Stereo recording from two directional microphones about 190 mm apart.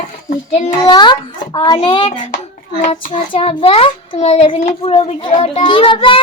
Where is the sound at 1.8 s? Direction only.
30° left (ahead or behind).